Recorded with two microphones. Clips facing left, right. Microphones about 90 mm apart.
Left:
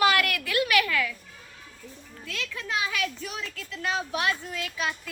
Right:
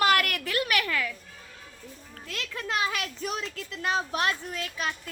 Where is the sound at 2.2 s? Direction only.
40° right (ahead or behind).